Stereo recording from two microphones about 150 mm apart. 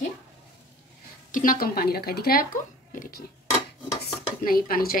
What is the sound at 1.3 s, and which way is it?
Speech, 70° left (ahead or behind).